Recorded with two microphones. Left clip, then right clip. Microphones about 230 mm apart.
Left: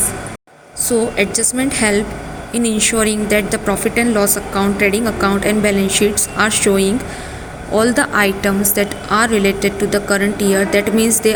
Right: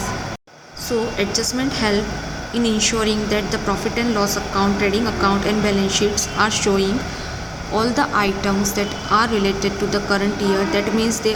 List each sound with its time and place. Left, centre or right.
0.9 s a woman's voice: left